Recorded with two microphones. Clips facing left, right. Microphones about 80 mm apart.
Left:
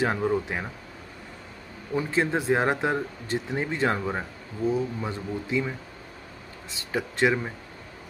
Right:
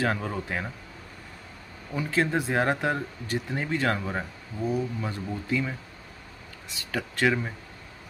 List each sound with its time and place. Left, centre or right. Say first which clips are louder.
0.0 s speech: left 4 dB; centre
2.0 s speech: left 1 dB; left
6.7 s speech: left 2 dB; left